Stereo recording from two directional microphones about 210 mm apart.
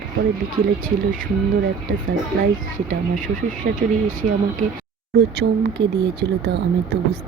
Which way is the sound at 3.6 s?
50° right (ahead or behind).